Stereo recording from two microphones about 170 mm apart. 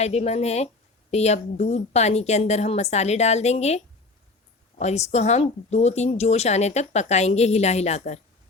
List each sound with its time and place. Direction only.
0.0 s speech: 40° left (ahead or behind)
4.8 s speech: 40° left (ahead or behind)